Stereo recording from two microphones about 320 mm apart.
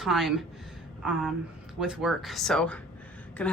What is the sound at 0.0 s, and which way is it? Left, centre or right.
Speech, centre.